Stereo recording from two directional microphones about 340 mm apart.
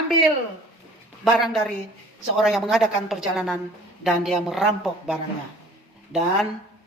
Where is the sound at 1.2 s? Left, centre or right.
Centre.